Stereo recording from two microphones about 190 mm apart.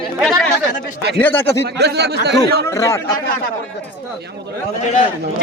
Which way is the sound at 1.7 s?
60° right (ahead or behind).